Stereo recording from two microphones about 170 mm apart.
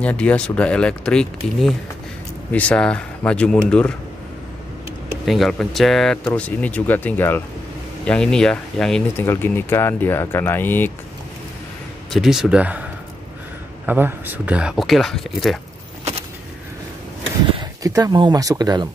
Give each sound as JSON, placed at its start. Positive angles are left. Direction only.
{"t": 0.0, "sound": "speech", "side_deg": 5}
{"t": 5.2, "sound": "speech", "side_deg": 0}
{"t": 12.1, "sound": "speech", "side_deg": 0}
{"t": 16.0, "sound": "a sound", "side_deg": -40}
{"t": 17.6, "sound": "speech", "side_deg": -20}